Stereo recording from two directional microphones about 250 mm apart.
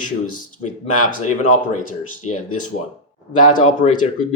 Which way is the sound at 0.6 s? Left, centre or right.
Left.